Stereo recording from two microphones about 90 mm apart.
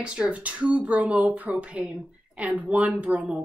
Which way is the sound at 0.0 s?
10° right (ahead or behind).